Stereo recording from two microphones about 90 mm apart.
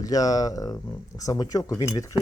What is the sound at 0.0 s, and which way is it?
Speech, 40° left (ahead or behind).